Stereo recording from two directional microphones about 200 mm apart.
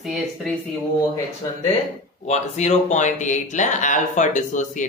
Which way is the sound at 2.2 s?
35° left (ahead or behind).